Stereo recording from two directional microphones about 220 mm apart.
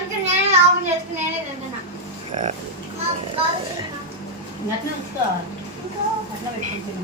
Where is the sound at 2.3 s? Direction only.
35° right (ahead or behind).